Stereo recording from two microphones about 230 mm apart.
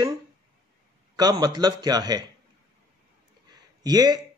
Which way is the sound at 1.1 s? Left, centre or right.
Centre.